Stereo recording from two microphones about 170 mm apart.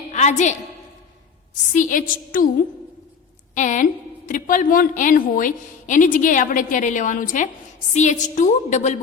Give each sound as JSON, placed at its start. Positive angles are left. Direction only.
{"t": 0.1, "sound": "a sound", "side_deg": 45}
{"t": 1.7, "sound": "a woman's voice", "side_deg": 50}
{"t": 3.5, "sound": "a woman's voice", "side_deg": 45}